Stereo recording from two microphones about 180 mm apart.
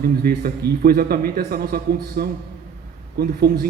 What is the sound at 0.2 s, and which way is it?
A man's voice, 55° right (ahead or behind).